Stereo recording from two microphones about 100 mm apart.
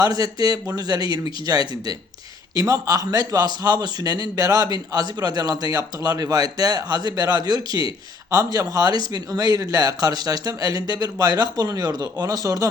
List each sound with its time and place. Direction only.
0.0 s a man's voice: 40° right (ahead or behind)